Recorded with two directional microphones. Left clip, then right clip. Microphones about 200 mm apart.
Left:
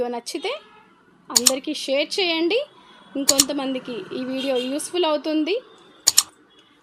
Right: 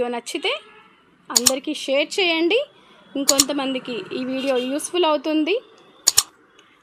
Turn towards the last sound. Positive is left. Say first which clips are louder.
# even
turn(degrees=0)  # may be behind; listen again after turning